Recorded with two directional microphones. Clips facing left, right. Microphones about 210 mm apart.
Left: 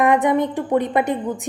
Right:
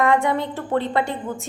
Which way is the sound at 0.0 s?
20° left (ahead or behind).